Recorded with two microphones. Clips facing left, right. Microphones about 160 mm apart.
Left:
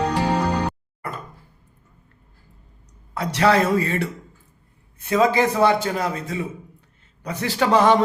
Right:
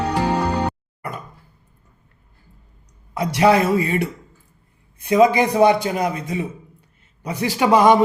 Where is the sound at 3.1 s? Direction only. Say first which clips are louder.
Right 3 dB; 15° right (ahead or behind).